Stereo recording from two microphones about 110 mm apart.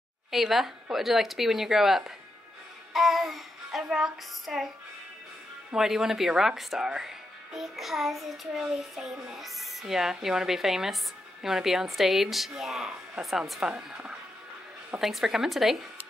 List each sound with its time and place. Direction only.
0.3 s speech: 5° right (ahead or behind)
2.9 s music: centre (ahead or behind)
3.8 s speech: 5° right (ahead or behind)
5.7 s speech: 5° right (ahead or behind)